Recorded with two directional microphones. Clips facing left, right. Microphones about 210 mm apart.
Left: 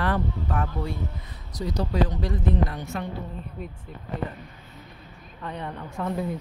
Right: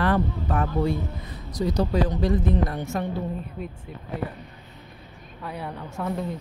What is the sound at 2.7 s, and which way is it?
Speech, 45° right (ahead or behind).